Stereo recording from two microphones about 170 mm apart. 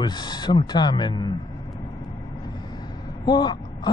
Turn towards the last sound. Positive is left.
turn(degrees=25)  # may be behind; listen again after turning